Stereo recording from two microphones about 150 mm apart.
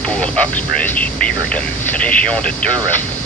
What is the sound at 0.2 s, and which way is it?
Speech, 10° left (ahead or behind).